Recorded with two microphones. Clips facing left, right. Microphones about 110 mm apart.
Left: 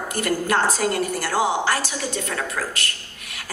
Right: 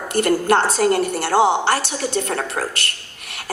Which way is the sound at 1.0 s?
70° right (ahead or behind).